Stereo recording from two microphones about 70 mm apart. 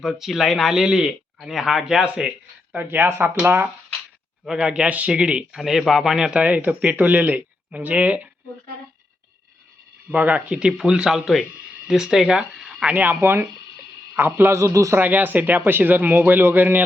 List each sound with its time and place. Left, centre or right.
0.0 s speech: centre
2.7 s speech: right
4.4 s speech: centre
5.5 s speech: centre; by 8.3 s right
10.1 s speech: centre
12.9 s a man's voice: right
14.9 s speech: right